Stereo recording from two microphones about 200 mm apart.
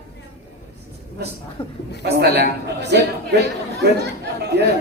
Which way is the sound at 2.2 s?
55° right (ahead or behind).